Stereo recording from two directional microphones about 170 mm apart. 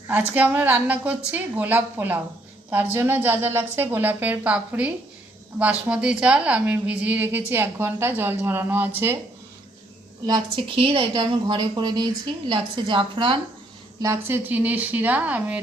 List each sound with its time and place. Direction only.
0.1 s a woman's voice: 10° right (ahead or behind)
10.2 s a woman's voice: 25° right (ahead or behind)
14.0 s a woman's voice: 15° right (ahead or behind)